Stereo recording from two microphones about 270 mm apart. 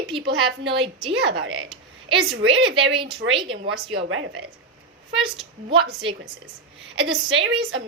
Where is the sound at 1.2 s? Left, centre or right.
Right.